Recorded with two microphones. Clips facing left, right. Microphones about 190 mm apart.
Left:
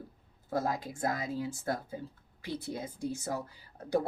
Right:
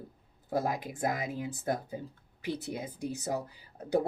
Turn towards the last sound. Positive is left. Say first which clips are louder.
# right 2 dB
turn(degrees=-20)  # may be behind; listen again after turning